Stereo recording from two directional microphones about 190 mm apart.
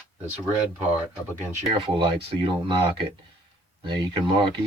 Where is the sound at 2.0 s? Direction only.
30° right (ahead or behind).